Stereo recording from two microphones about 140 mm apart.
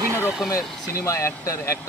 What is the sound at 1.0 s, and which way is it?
Speech, 20° left (ahead or behind).